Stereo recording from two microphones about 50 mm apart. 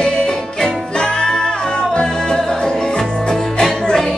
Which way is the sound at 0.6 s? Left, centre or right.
Centre.